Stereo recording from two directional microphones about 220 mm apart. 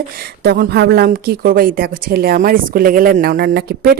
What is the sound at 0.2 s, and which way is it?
Speech, 45° right (ahead or behind).